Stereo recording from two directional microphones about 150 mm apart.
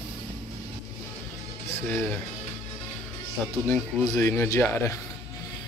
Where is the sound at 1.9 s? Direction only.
10° left (ahead or behind).